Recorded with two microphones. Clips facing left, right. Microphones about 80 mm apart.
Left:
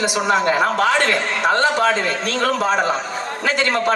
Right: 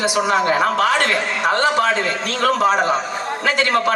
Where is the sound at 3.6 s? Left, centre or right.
Left.